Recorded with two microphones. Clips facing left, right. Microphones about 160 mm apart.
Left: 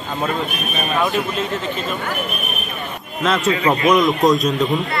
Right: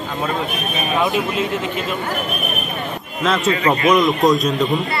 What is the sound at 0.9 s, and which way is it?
Speech, 20° right (ahead or behind).